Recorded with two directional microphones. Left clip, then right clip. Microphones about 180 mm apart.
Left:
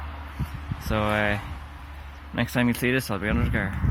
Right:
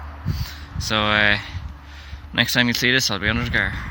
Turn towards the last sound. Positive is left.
turn(degrees=-10)  # may be behind; listen again after turning